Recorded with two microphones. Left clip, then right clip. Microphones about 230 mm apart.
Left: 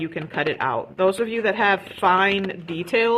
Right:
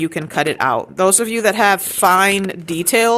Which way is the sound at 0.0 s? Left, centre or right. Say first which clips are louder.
Right 6 dB; right.